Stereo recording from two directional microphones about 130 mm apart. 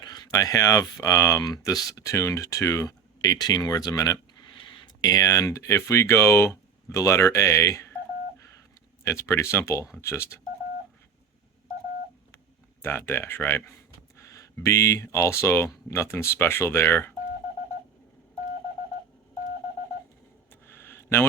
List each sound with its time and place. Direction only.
0.0 s speech: 30° left (ahead or behind)
9.0 s speech: 20° left (ahead or behind)
12.8 s speech: 20° left (ahead or behind)
20.5 s a sound: 15° left (ahead or behind)